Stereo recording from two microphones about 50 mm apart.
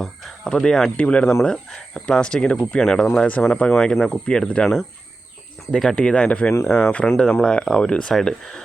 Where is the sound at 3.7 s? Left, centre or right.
Centre.